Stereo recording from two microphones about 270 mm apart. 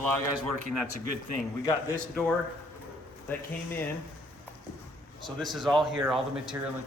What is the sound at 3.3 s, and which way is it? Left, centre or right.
Speech, centre.